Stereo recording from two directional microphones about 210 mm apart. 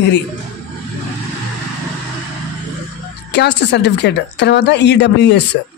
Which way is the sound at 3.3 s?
55° left (ahead or behind).